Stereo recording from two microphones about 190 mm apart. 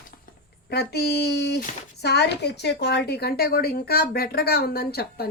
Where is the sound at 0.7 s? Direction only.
60° left (ahead or behind).